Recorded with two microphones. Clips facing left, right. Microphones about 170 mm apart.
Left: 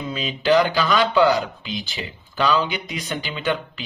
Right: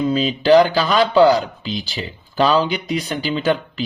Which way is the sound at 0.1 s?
30° right (ahead or behind).